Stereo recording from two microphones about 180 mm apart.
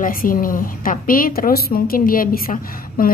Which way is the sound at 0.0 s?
50° left (ahead or behind).